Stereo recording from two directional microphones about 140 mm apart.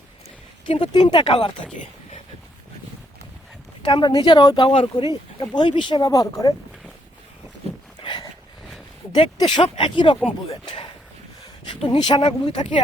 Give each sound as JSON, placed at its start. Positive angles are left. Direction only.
{"t": 0.6, "sound": "speech", "side_deg": 40}
{"t": 3.8, "sound": "speech", "side_deg": 35}
{"t": 8.0, "sound": "a sound", "side_deg": 35}
{"t": 9.1, "sound": "speech", "side_deg": 35}
{"t": 11.8, "sound": "speech", "side_deg": 35}